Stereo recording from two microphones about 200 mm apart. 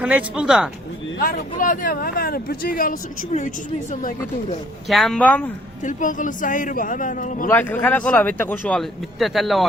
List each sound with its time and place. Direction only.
0.0 s speech: 5° right (ahead or behind)
1.2 s speech: 45° left (ahead or behind)
4.9 s speech: centre (ahead or behind)
5.8 s a man's voice: 40° left (ahead or behind)
7.5 s speech: 10° left (ahead or behind)